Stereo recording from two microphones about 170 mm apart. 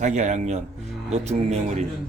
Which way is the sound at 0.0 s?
45° right (ahead or behind).